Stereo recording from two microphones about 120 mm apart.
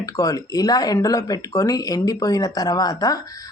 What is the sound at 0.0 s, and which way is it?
Speech, 30° left (ahead or behind).